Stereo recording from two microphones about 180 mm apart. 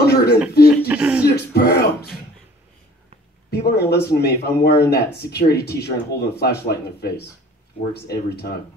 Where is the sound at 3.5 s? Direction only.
65° left (ahead or behind).